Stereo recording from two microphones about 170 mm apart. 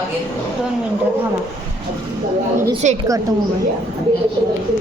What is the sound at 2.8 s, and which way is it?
Speech, 45° right (ahead or behind).